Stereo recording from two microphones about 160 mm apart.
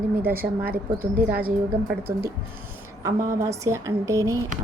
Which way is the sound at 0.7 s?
65° right (ahead or behind).